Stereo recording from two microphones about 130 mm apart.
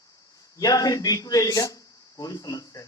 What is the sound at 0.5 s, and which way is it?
Speech, 30° left (ahead or behind).